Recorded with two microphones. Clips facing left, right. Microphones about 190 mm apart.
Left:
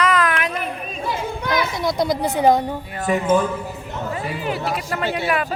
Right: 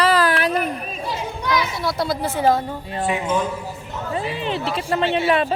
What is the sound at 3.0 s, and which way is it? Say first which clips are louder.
Speech: left 4 dB; 45° left (ahead or behind).